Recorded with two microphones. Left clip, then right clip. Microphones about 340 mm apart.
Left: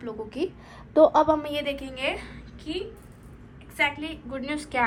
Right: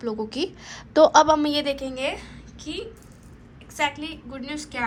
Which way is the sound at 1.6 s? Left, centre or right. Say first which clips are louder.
Right 4 dB; centre.